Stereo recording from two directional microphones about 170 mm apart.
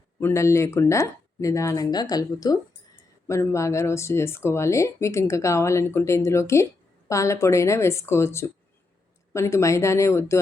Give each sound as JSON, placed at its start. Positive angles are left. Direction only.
{"t": 0.2, "sound": "speech", "side_deg": 15}